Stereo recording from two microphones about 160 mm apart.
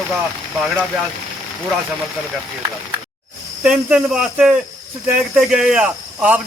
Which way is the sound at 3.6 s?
5° right (ahead or behind).